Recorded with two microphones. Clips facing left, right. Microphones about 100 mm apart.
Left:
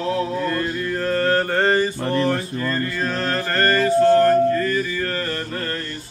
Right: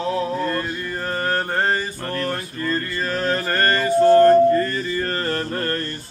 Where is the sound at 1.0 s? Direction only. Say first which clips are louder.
Left 4 dB; 10° right (ahead or behind).